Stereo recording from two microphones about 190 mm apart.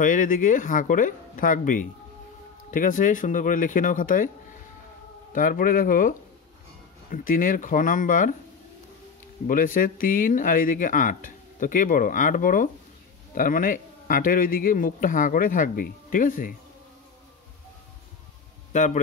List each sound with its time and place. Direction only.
0.0 s a man's voice: 45° left (ahead or behind)
9.5 s a man's voice: 45° left (ahead or behind)
18.7 s speech: 40° left (ahead or behind)